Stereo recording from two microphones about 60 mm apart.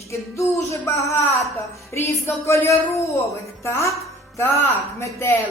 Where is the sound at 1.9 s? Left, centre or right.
Left.